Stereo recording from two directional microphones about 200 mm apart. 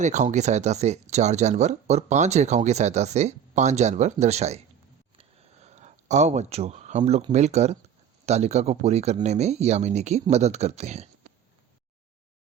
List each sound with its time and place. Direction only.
0.0 s speech: 35° right (ahead or behind)
5.6 s speech: 35° right (ahead or behind)